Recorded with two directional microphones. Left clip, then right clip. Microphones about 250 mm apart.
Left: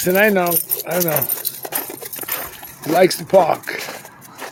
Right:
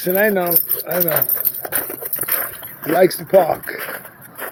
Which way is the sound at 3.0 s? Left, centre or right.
Centre.